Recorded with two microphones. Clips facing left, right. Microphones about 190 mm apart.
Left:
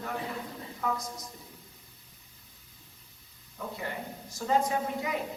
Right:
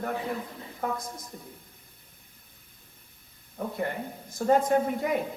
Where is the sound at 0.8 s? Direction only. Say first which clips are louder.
Right 1 dB; 55° right (ahead or behind).